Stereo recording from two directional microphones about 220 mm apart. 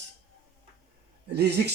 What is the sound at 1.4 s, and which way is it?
Speech, 50° right (ahead or behind).